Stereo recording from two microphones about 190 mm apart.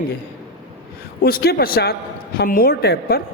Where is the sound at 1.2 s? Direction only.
55° left (ahead or behind).